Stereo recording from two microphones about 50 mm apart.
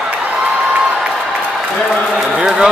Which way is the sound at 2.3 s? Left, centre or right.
Centre.